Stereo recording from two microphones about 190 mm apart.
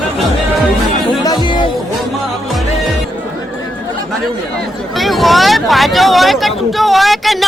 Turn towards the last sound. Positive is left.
turn(degrees=0)  # may be behind; listen again after turning